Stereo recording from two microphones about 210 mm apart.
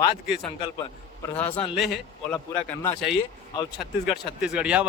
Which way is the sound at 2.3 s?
10° left (ahead or behind).